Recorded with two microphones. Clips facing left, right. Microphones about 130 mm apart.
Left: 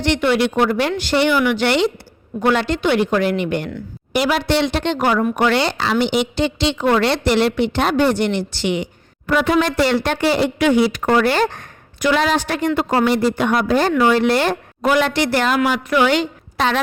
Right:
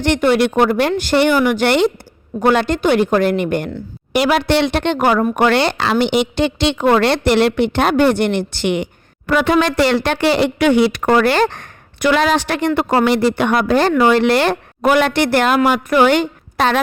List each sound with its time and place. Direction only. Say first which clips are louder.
0.0 s speech: right 3 dB; 50° right (ahead or behind)
4.1 s speech: right 3 dB; 65° right (ahead or behind)